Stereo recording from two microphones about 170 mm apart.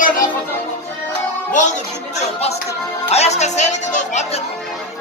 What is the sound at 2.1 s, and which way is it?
Music, 40° left (ahead or behind).